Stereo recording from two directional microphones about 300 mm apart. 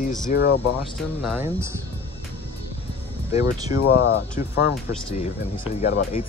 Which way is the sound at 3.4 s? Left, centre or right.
Centre.